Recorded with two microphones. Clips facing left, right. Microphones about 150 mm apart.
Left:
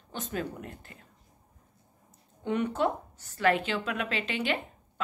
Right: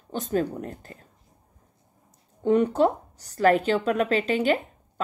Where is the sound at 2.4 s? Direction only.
35° right (ahead or behind).